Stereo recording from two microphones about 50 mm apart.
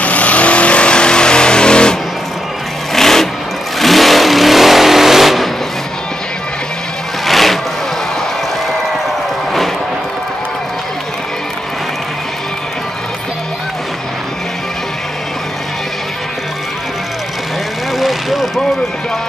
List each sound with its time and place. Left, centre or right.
0.0 s vehicle: left
2.9 s vehicle: centre
7.2 s vehicle: centre
17.9 s vehicle: centre